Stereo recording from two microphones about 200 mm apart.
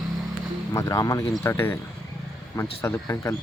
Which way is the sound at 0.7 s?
15° left (ahead or behind).